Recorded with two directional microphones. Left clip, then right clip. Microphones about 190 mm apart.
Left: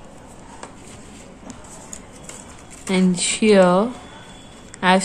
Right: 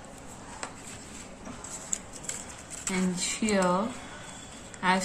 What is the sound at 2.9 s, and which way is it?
Speech, 50° left (ahead or behind).